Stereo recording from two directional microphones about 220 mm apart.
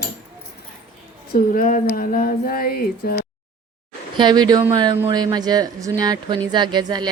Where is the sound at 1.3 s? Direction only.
40° left (ahead or behind).